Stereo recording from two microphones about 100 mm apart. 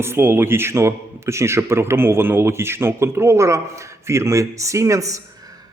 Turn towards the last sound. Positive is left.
turn(degrees=-35)  # may be behind; listen again after turning